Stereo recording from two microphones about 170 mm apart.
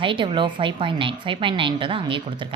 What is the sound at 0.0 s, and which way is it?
A woman's voice, 30° right (ahead or behind).